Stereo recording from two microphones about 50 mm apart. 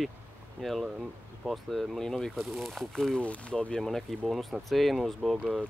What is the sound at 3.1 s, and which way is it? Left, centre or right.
Speech, left.